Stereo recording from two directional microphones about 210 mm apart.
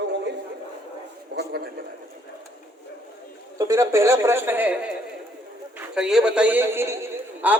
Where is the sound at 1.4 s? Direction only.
50° right (ahead or behind).